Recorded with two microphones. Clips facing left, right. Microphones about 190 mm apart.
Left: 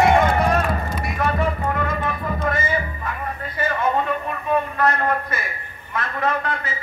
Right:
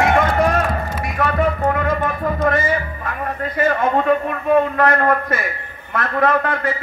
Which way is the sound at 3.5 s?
55° right (ahead or behind).